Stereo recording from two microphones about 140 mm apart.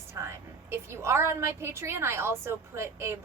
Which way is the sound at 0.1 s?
20° right (ahead or behind).